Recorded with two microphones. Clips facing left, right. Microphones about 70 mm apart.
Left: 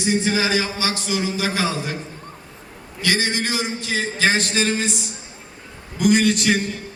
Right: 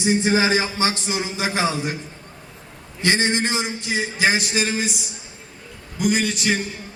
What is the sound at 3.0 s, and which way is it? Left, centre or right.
A man's voice, right.